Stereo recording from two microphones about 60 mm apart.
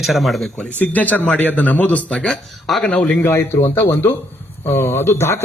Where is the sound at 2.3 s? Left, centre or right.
Centre.